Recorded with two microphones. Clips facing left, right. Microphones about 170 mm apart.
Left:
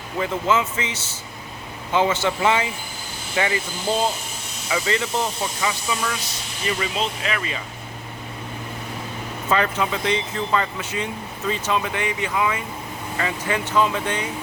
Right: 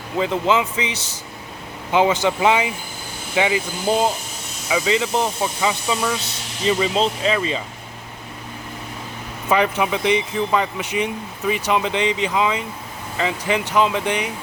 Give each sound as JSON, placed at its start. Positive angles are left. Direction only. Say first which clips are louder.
{"t": 0.2, "sound": "speech", "louder": "right 3 dB", "side_deg": -20}
{"t": 9.5, "sound": "speech", "louder": "right 3 dB", "side_deg": -15}